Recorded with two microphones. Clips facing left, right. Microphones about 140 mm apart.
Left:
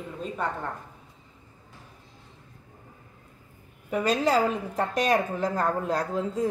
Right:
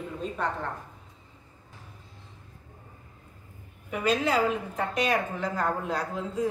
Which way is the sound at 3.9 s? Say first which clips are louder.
Left 2 dB; 35° left (ahead or behind).